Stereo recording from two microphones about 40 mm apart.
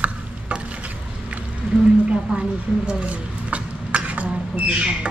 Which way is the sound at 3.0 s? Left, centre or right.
Right.